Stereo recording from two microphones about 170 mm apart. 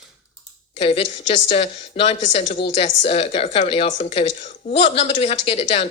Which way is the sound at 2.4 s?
90° left.